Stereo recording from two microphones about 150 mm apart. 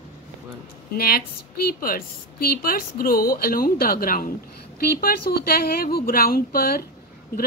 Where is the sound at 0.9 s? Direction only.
85° left.